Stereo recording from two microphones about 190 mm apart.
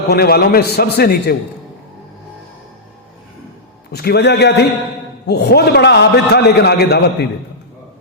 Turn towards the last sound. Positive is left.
turn(degrees=60)  # may be behind; listen again after turning